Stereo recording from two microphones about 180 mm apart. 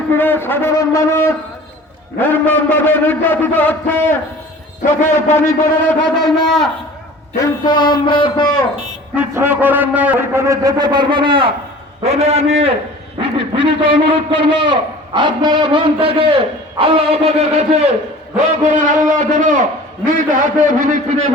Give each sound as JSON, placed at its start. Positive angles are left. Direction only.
{"t": 0.1, "sound": "a man's voice", "side_deg": 10}
{"t": 5.3, "sound": "a man's voice", "side_deg": 15}
{"t": 6.0, "sound": "a man's voice", "side_deg": 0}
{"t": 7.3, "sound": "a man's voice", "side_deg": 25}
{"t": 9.1, "sound": "a man's voice", "side_deg": -10}